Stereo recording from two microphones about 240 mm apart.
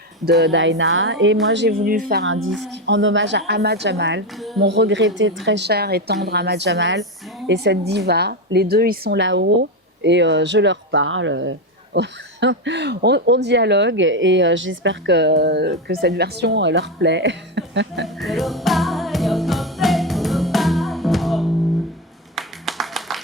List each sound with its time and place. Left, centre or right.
0.3 s speech: right
2.2 s a woman's voice: right
18.2 s music: centre
22.4 s clapping: centre